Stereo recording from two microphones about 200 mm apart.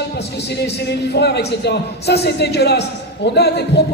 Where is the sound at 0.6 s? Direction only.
55° left (ahead or behind).